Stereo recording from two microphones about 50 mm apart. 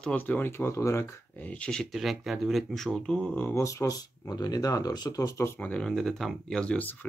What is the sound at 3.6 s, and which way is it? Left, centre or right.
Speech, left.